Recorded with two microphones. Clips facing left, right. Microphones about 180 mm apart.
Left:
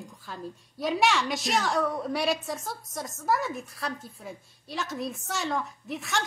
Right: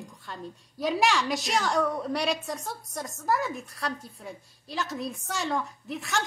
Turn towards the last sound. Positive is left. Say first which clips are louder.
# even
turn(degrees=0)  # may be behind; listen again after turning